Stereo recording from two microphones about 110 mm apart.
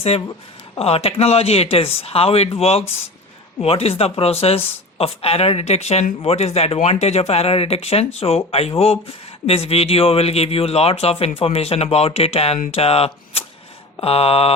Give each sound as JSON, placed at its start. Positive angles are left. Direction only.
{"t": 0.8, "sound": "speech", "side_deg": 65}